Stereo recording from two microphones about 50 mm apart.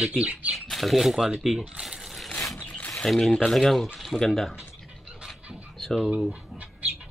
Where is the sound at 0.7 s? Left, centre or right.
Centre.